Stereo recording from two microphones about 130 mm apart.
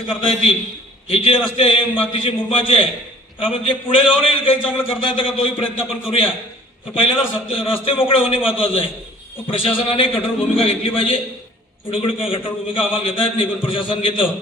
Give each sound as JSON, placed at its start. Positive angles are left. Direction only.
{"t": 0.1, "sound": "a man's voice", "side_deg": 45}